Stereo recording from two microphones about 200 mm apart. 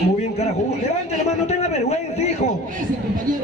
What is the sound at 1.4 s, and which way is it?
Speech, 35° left (ahead or behind).